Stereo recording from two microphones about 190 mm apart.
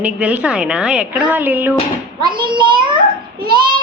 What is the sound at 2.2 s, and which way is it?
A child's voice, 25° right (ahead or behind).